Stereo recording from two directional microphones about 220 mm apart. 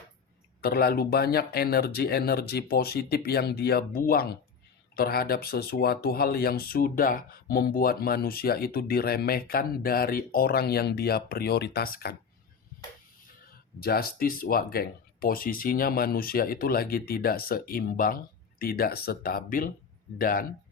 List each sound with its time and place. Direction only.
0.6 s speech: 45° left (ahead or behind)
13.7 s speech: 45° left (ahead or behind)